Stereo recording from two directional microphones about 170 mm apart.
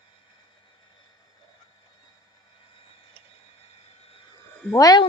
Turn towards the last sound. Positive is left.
turn(degrees=20)  # may be behind; listen again after turning